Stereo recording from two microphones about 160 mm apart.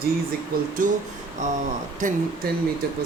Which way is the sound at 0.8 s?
55° right (ahead or behind).